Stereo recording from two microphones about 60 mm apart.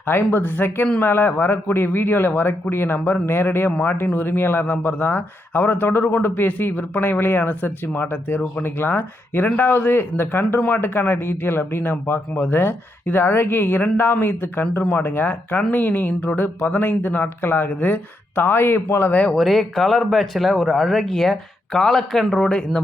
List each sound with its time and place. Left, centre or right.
0.0 s speech: left
19.3 s speech: centre